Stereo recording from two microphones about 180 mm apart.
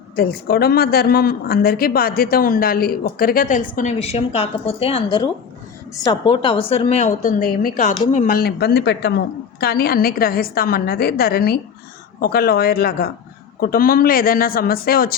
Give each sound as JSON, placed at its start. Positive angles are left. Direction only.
{"t": 0.2, "sound": "speech", "side_deg": 60}
{"t": 7.1, "sound": "a woman's voice", "side_deg": 45}
{"t": 8.4, "sound": "speech", "side_deg": 60}